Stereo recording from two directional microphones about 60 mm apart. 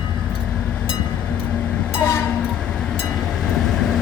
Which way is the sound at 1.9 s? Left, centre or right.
Left.